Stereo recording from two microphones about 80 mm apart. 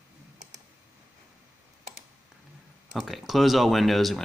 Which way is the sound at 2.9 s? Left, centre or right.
Centre.